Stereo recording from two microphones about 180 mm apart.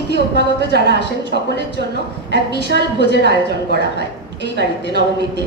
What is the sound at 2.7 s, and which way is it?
Speech, 70° right (ahead or behind).